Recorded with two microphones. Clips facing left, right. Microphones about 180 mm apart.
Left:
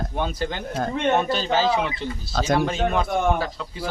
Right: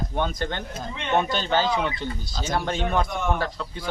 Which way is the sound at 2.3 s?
70° left (ahead or behind).